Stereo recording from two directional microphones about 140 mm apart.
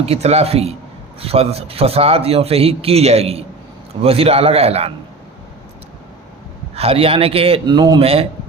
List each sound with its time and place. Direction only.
0.0 s a man's voice: 50° right (ahead or behind)
6.7 s a man's voice: 45° right (ahead or behind)
7.7 s speech: 30° right (ahead or behind)